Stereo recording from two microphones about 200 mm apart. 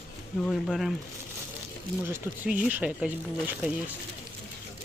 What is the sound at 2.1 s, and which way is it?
Speech, 5° right (ahead or behind).